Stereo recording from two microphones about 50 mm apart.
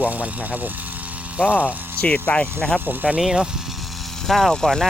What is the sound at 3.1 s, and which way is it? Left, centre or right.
Speech, centre.